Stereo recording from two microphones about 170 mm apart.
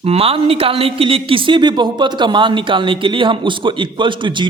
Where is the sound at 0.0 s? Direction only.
35° right (ahead or behind).